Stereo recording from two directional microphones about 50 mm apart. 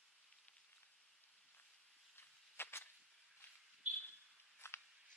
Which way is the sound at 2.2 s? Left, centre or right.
Left.